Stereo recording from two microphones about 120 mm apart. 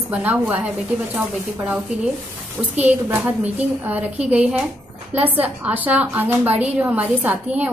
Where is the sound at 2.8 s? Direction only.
15° right (ahead or behind).